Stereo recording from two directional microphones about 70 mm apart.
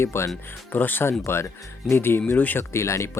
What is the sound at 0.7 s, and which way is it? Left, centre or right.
Speech, left.